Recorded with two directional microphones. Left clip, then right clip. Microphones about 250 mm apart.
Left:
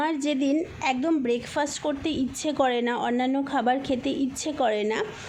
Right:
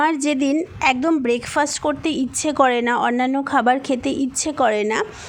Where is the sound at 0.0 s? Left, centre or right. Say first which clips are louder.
Right 7 dB; right.